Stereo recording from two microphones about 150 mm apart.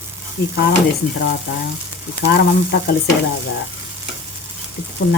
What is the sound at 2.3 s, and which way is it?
Speech, 90° left.